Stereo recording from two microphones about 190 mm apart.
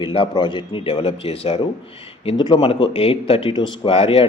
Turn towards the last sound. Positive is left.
turn(degrees=30)  # may be behind; listen again after turning